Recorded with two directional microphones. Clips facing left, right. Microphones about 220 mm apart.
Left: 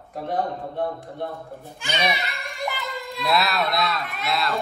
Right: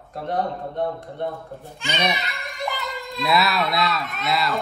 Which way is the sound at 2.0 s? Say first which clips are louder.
Left 1 dB; centre (ahead or behind).